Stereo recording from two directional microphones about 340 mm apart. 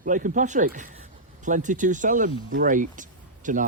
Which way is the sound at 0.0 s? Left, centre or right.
Right.